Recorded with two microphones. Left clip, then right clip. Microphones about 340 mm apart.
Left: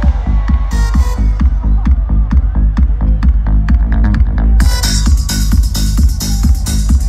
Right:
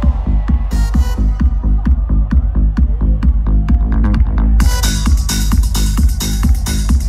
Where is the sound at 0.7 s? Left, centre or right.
Right.